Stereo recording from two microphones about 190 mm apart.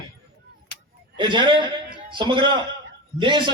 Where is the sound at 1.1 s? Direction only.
25° right (ahead or behind).